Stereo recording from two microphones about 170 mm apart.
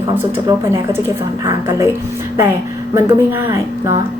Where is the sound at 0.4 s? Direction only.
15° right (ahead or behind).